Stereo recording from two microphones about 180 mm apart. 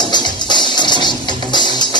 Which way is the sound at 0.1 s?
25° left (ahead or behind).